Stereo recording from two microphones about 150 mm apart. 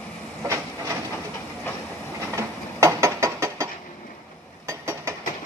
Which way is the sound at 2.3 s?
20° right (ahead or behind).